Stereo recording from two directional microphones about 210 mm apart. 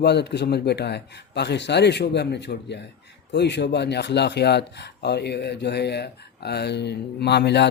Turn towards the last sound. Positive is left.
turn(degrees=55)  # may be behind; listen again after turning